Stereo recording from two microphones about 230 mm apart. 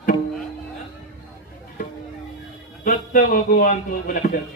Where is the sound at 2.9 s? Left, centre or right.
Left.